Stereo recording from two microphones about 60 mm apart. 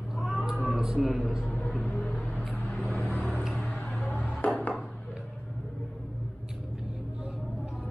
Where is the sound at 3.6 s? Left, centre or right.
Centre.